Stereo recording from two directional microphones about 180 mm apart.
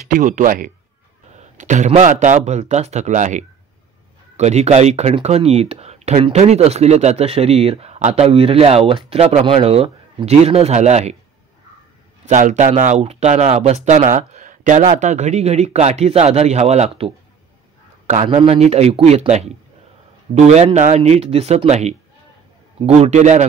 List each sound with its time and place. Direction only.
0.1 s speech: 45° right (ahead or behind)
12.3 s speech: 45° right (ahead or behind)